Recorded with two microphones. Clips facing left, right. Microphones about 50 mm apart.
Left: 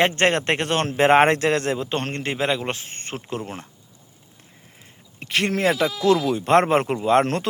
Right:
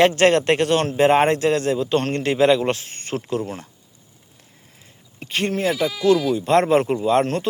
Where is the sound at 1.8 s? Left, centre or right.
Left.